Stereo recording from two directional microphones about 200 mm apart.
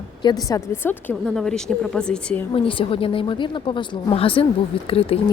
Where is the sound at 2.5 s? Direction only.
25° left (ahead or behind).